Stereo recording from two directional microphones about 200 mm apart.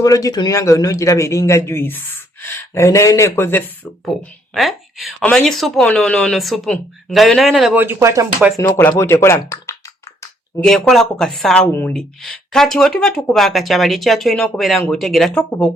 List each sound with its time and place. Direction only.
0.0 s a man's voice: 20° left (ahead or behind); by 8.3 s 15° right (ahead or behind)
8.5 s a man's voice: 15° left (ahead or behind)
10.6 s speech: centre (ahead or behind)